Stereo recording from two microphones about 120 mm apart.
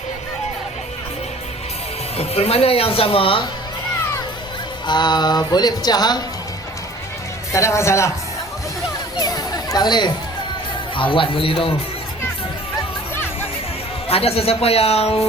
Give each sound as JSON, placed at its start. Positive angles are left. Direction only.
{"t": 2.1, "sound": "a woman's voice", "side_deg": 60}
{"t": 4.9, "sound": "speech", "side_deg": 40}
{"t": 7.5, "sound": "speech", "side_deg": 25}
{"t": 9.1, "sound": "chatter", "side_deg": 35}
{"t": 10.9, "sound": "a woman's voice", "side_deg": 45}
{"t": 14.1, "sound": "speech", "side_deg": 55}